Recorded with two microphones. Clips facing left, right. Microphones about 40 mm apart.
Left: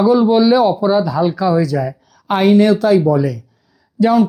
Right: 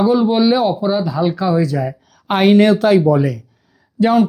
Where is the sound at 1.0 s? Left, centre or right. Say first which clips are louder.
Left 2 dB; right.